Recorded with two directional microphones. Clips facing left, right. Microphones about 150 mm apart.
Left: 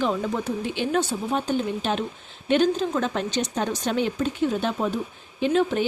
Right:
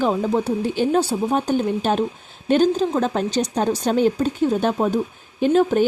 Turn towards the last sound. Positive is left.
turn(degrees=-45)  # may be behind; listen again after turning